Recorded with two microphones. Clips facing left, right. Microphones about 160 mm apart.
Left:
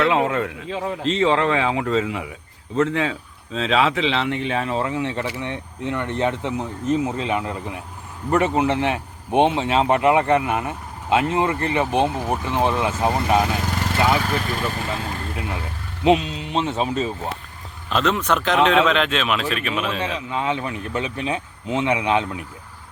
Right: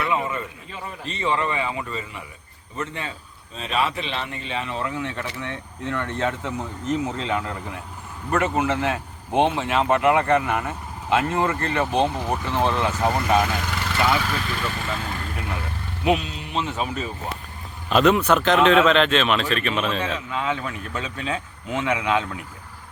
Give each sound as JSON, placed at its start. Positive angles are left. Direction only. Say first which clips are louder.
{"t": 0.0, "sound": "speech", "louder": "left 6 dB", "side_deg": 85}
{"t": 4.5, "sound": "speech", "louder": "left 1 dB", "side_deg": 40}
{"t": 13.1, "sound": "speech", "louder": "left 1 dB", "side_deg": 25}
{"t": 14.2, "sound": "speech", "louder": "left 3 dB", "side_deg": 40}
{"t": 15.4, "sound": "speech", "louder": "left 2 dB", "side_deg": 20}
{"t": 17.8, "sound": "speech", "louder": "right 3 dB", "side_deg": -10}